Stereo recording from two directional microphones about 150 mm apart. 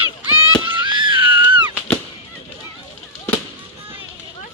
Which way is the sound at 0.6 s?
30° right (ahead or behind).